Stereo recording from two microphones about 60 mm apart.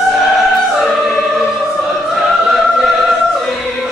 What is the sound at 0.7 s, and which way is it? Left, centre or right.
Opera, centre.